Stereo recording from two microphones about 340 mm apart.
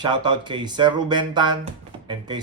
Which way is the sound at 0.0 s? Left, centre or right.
Centre.